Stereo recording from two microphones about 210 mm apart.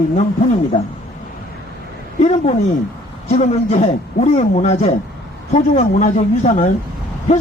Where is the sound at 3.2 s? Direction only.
35° left (ahead or behind).